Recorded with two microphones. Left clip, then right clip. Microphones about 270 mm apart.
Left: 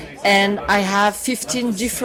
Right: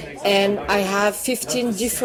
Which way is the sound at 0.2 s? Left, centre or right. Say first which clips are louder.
Left 2 dB; left.